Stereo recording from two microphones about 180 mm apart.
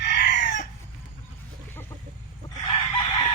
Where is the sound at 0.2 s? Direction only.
45° left (ahead or behind).